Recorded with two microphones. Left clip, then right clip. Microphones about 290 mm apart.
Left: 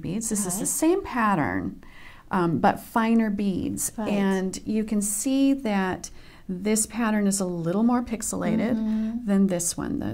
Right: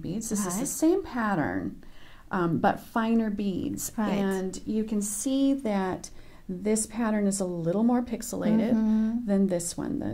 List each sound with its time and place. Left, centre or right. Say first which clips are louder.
0.0 s a woman's voice: left 2 dB; left
3.9 s a woman's voice: even; right
4.2 s a woman's voice: left 3 dB; left
8.7 s speech: right 1 dB; right
9.3 s a woman's voice: left 4 dB; left